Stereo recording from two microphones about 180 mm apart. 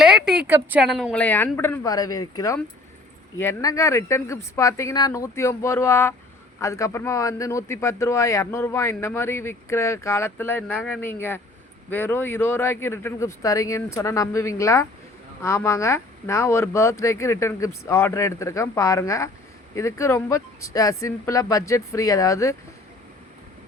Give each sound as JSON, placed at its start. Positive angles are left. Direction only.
{"t": 0.0, "sound": "speech", "side_deg": 0}